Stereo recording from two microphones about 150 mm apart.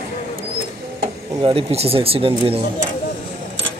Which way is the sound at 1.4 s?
40° right (ahead or behind).